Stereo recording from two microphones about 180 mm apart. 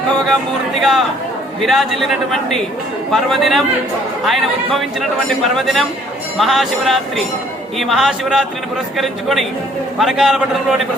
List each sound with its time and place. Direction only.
0.8 s speech: centre (ahead or behind)
3.1 s speech: centre (ahead or behind)